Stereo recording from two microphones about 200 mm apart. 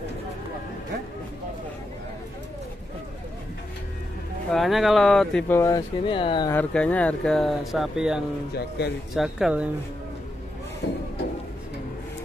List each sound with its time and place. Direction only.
4.5 s speech: centre (ahead or behind)
5.6 s speech: 20° left (ahead or behind)
6.5 s speech: 5° left (ahead or behind)
8.5 s speech: 55° left (ahead or behind)
9.1 s speech: centre (ahead or behind)
10.8 s a sound: 55° left (ahead or behind)